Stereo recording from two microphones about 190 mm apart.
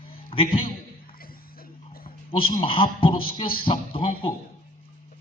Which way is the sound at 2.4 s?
30° left (ahead or behind).